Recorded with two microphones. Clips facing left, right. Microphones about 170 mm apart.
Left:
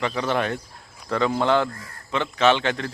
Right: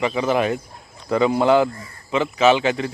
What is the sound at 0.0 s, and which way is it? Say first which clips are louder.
Speech: right 4 dB; 5° right (ahead or behind).